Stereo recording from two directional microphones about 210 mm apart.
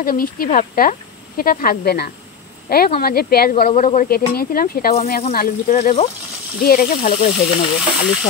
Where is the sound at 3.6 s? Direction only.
35° left (ahead or behind).